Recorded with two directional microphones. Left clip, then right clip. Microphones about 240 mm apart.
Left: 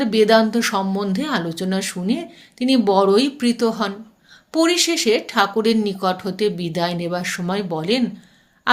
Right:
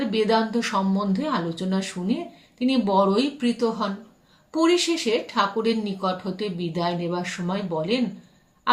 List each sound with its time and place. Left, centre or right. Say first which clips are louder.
0.0 s speech: left 7 dB; left